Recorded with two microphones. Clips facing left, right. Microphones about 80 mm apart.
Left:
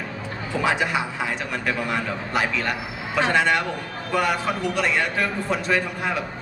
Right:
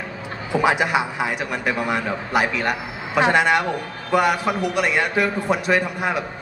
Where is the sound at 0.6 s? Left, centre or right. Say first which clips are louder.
Right 4 dB; centre.